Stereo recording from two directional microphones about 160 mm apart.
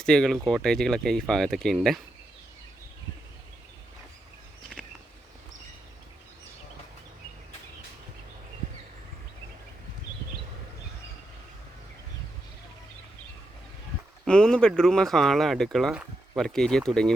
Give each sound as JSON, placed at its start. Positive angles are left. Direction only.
{"t": 0.0, "sound": "speech", "side_deg": 5}
{"t": 14.3, "sound": "speech", "side_deg": 5}